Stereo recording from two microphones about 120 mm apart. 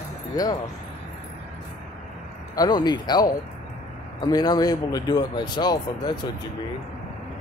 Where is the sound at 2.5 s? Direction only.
35° left (ahead or behind).